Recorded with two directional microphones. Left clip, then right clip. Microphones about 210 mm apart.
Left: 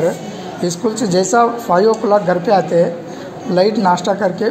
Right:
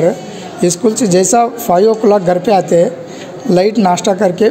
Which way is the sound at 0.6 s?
45° right (ahead or behind).